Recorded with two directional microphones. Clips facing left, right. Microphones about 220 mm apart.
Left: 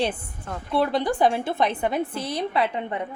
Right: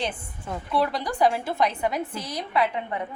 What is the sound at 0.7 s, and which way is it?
A woman's voice, 25° left (ahead or behind).